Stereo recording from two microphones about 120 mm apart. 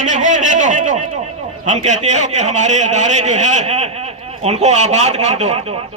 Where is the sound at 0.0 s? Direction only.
90° right.